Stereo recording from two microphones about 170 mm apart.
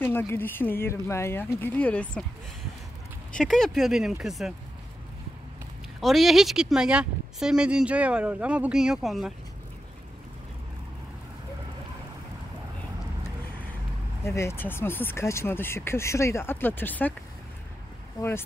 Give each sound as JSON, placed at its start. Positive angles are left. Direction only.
{"t": 0.0, "sound": "speech", "side_deg": 15}
{"t": 3.3, "sound": "speech", "side_deg": 5}
{"t": 5.9, "sound": "speech", "side_deg": 0}
{"t": 14.2, "sound": "speech", "side_deg": 15}
{"t": 18.2, "sound": "speech", "side_deg": 25}